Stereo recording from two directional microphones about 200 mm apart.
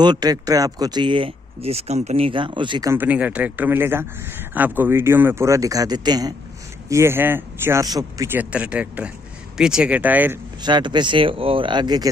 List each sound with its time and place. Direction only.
0.0 s speech: 20° right (ahead or behind)
10.6 s speech: 20° right (ahead or behind)